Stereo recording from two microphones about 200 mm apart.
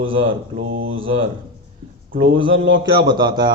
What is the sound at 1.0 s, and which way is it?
A man's voice, 25° right (ahead or behind).